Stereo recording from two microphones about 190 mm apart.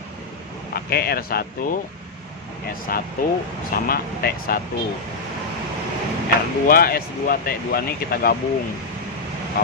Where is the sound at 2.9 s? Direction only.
50° left (ahead or behind).